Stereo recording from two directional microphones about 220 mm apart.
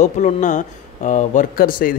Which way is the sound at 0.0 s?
35° left (ahead or behind).